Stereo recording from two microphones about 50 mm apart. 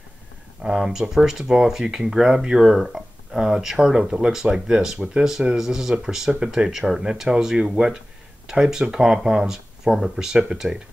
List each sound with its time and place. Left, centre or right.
0.6 s speech: centre